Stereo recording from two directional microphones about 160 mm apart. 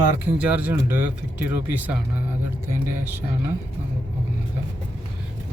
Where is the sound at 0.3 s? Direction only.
10° right (ahead or behind).